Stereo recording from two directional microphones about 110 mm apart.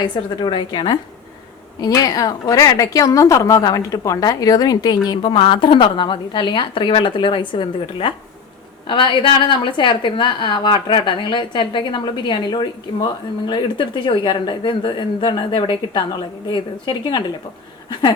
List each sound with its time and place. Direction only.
0.0 s a woman's voice: 45° left (ahead or behind)